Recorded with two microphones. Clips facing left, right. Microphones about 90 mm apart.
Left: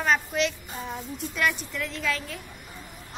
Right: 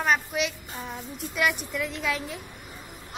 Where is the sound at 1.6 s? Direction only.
15° right (ahead or behind).